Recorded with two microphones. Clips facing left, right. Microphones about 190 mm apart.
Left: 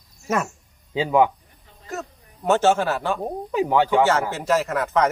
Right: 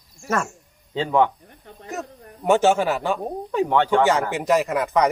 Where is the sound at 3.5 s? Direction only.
5° left (ahead or behind).